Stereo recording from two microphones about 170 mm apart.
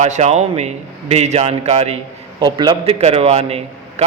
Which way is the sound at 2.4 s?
25° right (ahead or behind).